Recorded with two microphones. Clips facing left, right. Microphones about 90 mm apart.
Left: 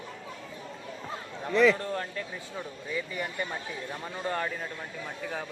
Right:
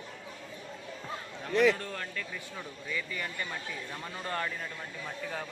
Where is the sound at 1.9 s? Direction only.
25° left (ahead or behind).